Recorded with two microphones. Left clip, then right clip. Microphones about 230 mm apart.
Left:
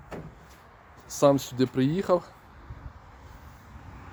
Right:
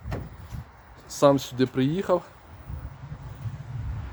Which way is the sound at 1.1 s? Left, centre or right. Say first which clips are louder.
Right 2 dB; centre.